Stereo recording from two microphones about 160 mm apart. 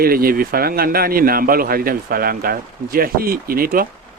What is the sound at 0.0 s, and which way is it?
Speech, 70° right (ahead or behind).